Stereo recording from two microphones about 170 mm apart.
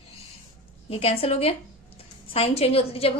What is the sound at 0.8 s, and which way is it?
A woman's voice, 35° left (ahead or behind).